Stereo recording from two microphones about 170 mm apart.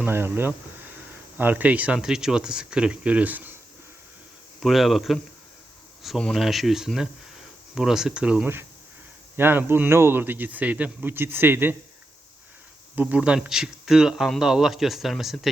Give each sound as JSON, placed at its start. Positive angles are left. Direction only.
{"t": 0.0, "sound": "speech", "side_deg": -10}
{"t": 4.6, "sound": "speech", "side_deg": 0}
{"t": 13.0, "sound": "speech", "side_deg": -5}